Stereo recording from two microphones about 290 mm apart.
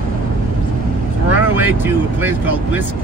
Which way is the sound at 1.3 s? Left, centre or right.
Centre.